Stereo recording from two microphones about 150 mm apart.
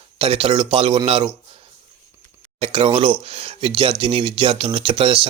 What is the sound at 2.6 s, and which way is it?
Speech, 35° right (ahead or behind).